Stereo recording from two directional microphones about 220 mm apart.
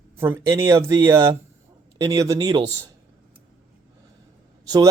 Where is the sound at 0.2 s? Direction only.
10° right (ahead or behind).